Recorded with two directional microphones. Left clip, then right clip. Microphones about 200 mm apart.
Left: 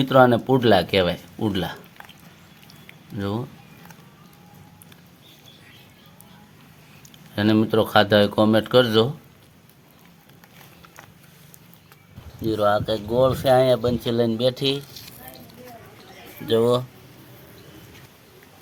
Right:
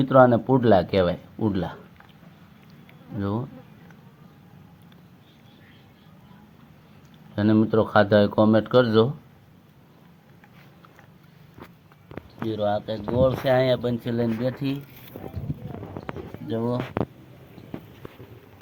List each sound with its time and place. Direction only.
0.0 s speech: 5° left (ahead or behind)
3.2 s speech: 5° left (ahead or behind)
7.3 s speech: 10° left (ahead or behind)
12.5 s speech: 25° left (ahead or behind)
16.5 s speech: 55° left (ahead or behind)